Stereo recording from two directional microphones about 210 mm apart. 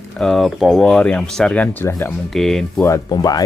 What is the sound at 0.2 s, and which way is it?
Speech, centre (ahead or behind).